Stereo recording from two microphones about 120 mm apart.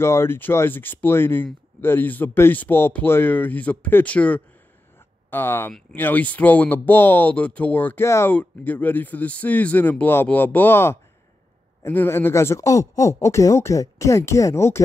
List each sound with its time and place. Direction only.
0.0 s speech: 20° left (ahead or behind)